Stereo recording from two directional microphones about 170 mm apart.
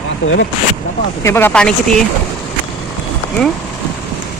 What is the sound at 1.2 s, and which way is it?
Speech, 15° left (ahead or behind).